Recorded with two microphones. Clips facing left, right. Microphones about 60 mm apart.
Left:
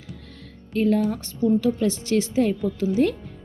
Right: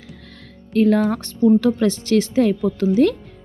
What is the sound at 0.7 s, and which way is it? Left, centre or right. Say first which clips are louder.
Speech: right 5 dB; right.